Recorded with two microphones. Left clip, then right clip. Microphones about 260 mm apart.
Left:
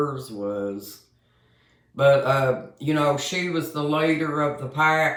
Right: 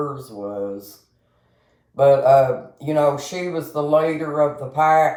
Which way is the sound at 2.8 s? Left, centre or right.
Centre.